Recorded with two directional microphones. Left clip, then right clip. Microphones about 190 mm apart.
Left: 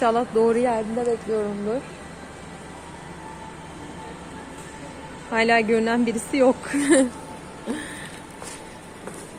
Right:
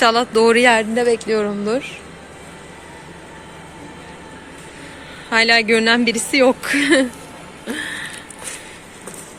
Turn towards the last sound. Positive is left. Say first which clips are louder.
# right 5 dB
turn(degrees=5)  # may be behind; listen again after turning